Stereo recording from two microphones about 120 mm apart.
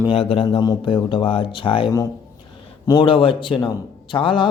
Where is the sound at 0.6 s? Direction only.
40° left (ahead or behind).